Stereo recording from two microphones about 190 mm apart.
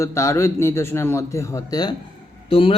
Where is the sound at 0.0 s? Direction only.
15° left (ahead or behind).